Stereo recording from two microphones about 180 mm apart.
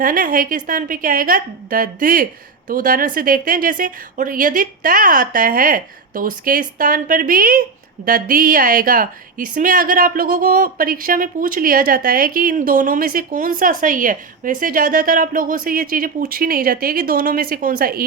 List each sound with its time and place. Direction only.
0.0 s a woman's voice: 50° right (ahead or behind)